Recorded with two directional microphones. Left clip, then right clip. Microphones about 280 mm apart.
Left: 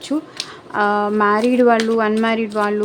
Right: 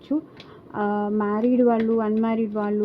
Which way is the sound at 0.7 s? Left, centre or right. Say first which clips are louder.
Left 8 dB; centre.